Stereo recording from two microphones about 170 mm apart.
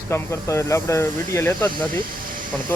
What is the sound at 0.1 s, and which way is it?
Speech, 15° left (ahead or behind).